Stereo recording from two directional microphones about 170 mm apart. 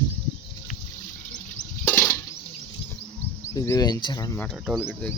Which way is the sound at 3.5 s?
20° left (ahead or behind).